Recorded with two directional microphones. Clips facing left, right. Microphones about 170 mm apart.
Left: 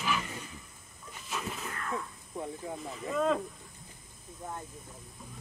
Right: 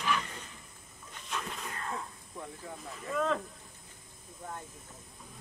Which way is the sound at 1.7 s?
25° right (ahead or behind).